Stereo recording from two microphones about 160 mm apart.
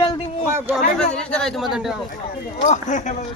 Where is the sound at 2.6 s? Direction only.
50° left (ahead or behind).